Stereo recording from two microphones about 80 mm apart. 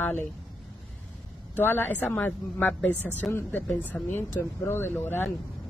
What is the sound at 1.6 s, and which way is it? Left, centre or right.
A woman's voice, left.